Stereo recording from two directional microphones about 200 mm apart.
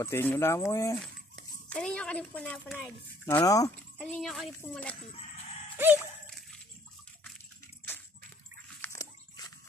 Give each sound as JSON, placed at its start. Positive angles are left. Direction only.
{"t": 0.0, "sound": "speech", "side_deg": 10}
{"t": 0.9, "sound": "a child's voice", "side_deg": 5}
{"t": 3.3, "sound": "speech", "side_deg": 15}
{"t": 4.0, "sound": "speech", "side_deg": 0}
{"t": 7.8, "sound": "a sound", "side_deg": 10}
{"t": 8.8, "sound": "dog", "side_deg": 15}